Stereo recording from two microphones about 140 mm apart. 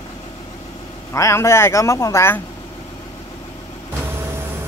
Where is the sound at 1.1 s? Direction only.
20° left (ahead or behind).